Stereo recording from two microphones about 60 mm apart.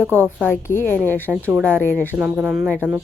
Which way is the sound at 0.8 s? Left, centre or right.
Left.